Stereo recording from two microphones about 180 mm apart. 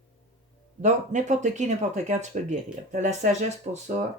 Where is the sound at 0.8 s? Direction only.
40° right (ahead or behind).